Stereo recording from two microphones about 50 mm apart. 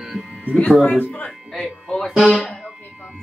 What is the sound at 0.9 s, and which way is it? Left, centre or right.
Speech, left.